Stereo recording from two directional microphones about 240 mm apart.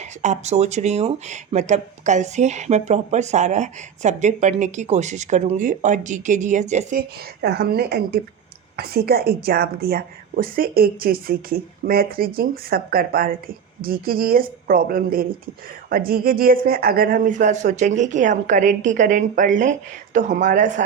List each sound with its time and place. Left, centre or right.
0.0 s speech: right
7.4 s a woman's voice: right